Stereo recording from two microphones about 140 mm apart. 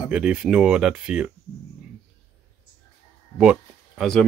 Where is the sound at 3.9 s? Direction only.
Centre (ahead or behind).